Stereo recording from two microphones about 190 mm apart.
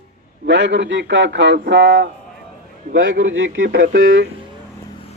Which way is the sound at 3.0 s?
85° right.